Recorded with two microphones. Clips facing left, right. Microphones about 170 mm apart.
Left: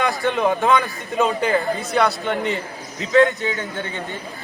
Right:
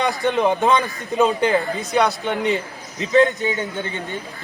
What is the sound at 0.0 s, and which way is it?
Speech, 20° right (ahead or behind).